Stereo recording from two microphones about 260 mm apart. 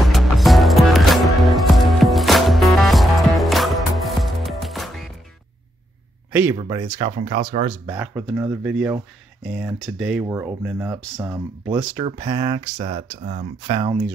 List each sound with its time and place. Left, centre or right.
0.0 s music: centre
6.5 s speech: centre
7.1 s speech: right
7.8 s speech: centre